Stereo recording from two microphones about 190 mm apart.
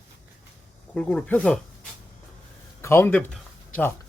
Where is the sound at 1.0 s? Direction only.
5° left (ahead or behind).